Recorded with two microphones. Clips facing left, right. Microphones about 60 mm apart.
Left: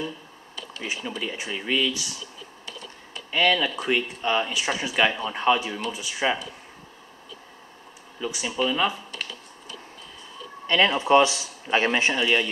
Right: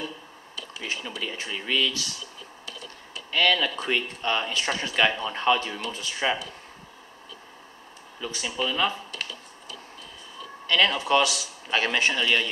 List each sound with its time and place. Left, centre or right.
0.8 s speech: centre
3.3 s speech: centre
8.2 s speech: centre
10.7 s speech: left
12.2 s speech: centre